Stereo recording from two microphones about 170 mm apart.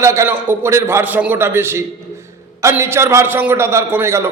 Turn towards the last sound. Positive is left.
turn(degrees=-15)  # may be behind; listen again after turning